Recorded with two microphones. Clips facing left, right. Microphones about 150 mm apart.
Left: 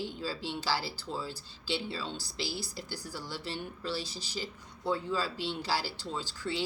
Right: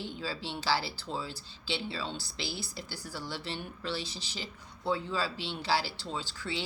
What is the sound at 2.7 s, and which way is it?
A woman's voice, 40° left (ahead or behind).